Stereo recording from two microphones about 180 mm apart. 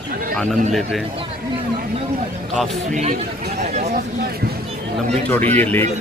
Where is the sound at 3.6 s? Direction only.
40° right (ahead or behind).